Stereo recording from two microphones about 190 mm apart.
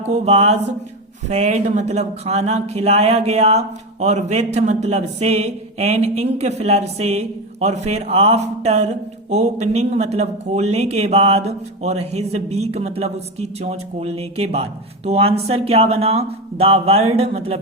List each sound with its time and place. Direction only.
0.1 s speech: 35° right (ahead or behind)